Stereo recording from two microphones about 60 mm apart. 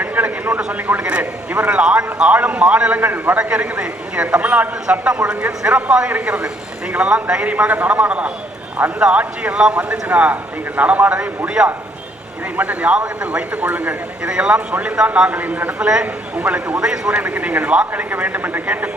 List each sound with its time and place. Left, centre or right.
0.0 s a sound: right
0.7 s a man's voice: right
3.0 s a man's voice: right
3.5 s a man's voice: centre
14.3 s a man's voice: centre